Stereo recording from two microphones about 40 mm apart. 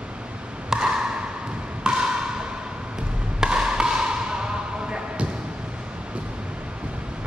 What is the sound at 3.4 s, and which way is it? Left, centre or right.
Music, centre.